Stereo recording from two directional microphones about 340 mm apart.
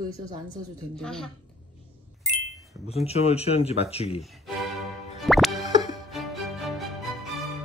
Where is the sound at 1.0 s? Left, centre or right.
Centre.